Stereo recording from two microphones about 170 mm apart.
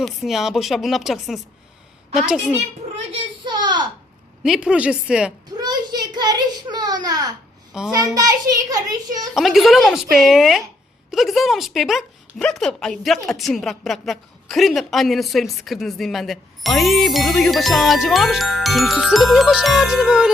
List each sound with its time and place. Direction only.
0.0 s a woman's voice: centre (ahead or behind)
3.1 s a sound: 25° right (ahead or behind)
4.4 s a woman's voice: 5° right (ahead or behind)
5.5 s a sound: 25° right (ahead or behind)
6.1 s a child's voice: 25° right (ahead or behind)
7.7 s a child's voice: 5° right (ahead or behind)
8.1 s a child's voice: 20° right (ahead or behind)
9.3 s a woman's voice: centre (ahead or behind)